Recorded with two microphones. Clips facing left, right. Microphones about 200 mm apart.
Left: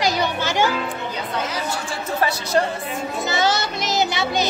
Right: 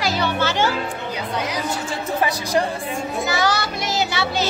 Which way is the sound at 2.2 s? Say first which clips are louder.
Left 1 dB; 15° right (ahead or behind).